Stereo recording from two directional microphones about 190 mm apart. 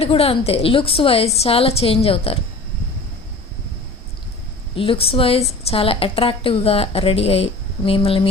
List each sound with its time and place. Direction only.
0.0 s a woman's voice: 30° left (ahead or behind)
4.7 s a woman's voice: 30° left (ahead or behind)